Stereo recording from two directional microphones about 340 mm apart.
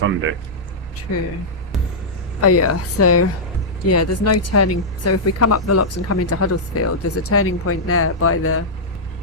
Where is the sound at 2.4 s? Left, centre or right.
Left.